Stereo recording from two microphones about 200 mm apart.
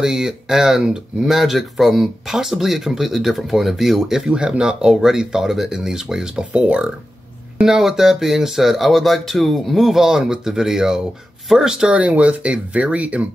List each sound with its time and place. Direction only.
0.0 s speech: 5° right (ahead or behind)